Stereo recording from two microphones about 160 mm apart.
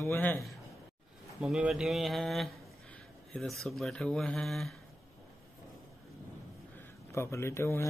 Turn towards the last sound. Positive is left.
turn(degrees=15)  # may be behind; listen again after turning